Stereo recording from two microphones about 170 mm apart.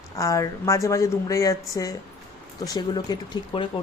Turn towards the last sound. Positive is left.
turn(degrees=25)  # may be behind; listen again after turning